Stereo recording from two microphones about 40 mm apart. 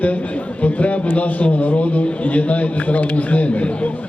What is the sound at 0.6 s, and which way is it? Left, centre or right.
A man's voice, left.